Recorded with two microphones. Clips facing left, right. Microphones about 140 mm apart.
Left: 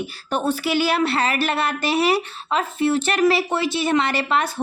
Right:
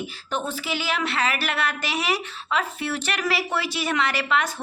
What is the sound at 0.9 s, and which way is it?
A woman's voice, 35° left (ahead or behind).